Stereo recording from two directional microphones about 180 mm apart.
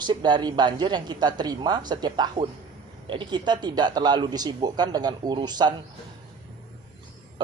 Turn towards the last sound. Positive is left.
turn(degrees=-25)  # may be behind; listen again after turning